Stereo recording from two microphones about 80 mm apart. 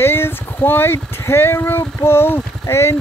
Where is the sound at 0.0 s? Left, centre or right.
Left.